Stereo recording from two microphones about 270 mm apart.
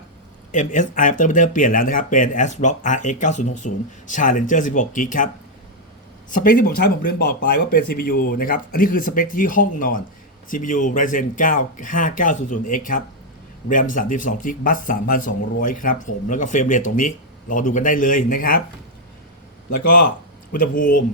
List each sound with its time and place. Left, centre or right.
0.5 s a man's voice: left
6.3 s a man's voice: left
19.7 s a man's voice: left
20.5 s speech: left